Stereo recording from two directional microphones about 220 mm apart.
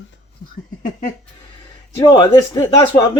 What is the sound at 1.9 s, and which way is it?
Speech, 15° left (ahead or behind).